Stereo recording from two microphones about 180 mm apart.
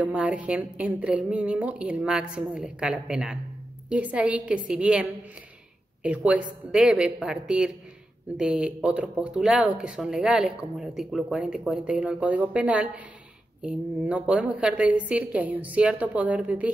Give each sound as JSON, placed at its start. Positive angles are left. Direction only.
{"t": 0.0, "sound": "a woman's voice", "side_deg": -5}